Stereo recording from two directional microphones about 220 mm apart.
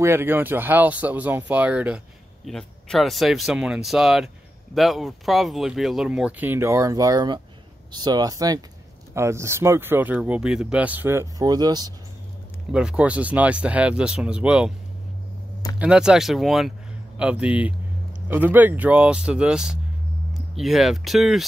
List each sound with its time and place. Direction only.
0.0 s speech: 10° right (ahead or behind)
12.7 s speech: 5° right (ahead or behind)
15.8 s speech: 5° right (ahead or behind)